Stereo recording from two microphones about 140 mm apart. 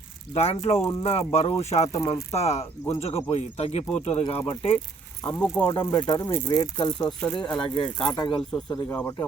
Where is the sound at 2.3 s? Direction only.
50° left (ahead or behind).